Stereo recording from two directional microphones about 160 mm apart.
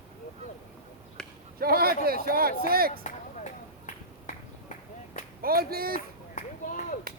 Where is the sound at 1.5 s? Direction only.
70° right (ahead or behind).